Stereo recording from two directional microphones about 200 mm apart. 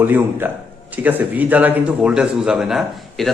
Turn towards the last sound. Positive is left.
turn(degrees=0)  # may be behind; listen again after turning